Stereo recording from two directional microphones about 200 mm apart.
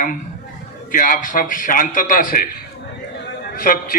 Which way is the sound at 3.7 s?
40° left (ahead or behind).